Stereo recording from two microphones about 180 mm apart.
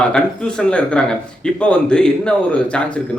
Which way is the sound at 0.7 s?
5° left (ahead or behind).